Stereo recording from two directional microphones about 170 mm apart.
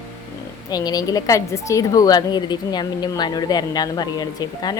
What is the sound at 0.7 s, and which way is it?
Speech, 20° left (ahead or behind).